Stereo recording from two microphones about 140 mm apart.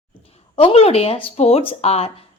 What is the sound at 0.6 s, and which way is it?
A woman's voice, 45° left (ahead or behind).